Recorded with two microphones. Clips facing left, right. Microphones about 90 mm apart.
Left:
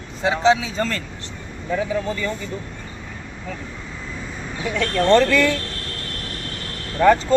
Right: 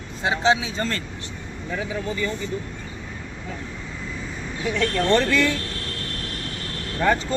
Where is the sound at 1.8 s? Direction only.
15° right (ahead or behind).